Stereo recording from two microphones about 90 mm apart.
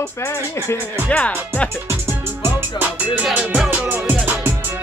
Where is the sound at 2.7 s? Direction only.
15° right (ahead or behind).